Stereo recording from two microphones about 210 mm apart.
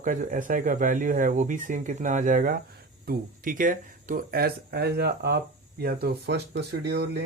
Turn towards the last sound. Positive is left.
turn(degrees=-50)  # may be behind; listen again after turning